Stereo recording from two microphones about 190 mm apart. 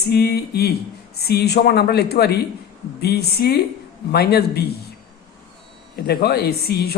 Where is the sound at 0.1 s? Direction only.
55° left (ahead or behind).